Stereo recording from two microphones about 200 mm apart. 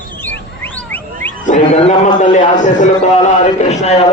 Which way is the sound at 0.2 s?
10° left (ahead or behind).